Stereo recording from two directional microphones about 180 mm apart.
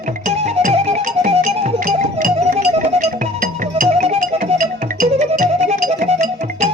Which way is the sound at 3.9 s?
35° right (ahead or behind).